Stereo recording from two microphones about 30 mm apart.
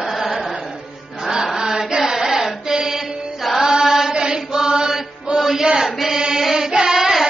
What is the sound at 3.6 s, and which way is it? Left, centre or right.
Chant, centre.